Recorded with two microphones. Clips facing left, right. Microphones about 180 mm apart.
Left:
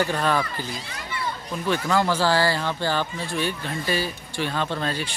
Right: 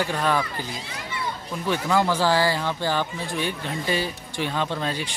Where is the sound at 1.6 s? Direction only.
15° right (ahead or behind).